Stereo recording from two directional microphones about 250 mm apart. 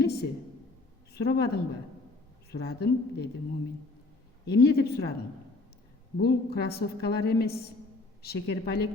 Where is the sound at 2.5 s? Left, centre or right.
Left.